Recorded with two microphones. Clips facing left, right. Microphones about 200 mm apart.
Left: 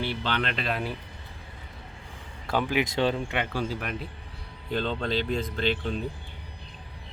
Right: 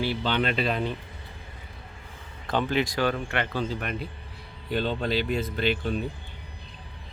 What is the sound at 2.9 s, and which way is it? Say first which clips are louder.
Speech: left 1 dB; 25° left (ahead or behind).